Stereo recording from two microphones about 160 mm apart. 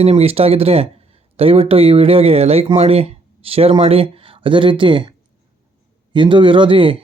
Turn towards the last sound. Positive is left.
turn(degrees=-35)  # may be behind; listen again after turning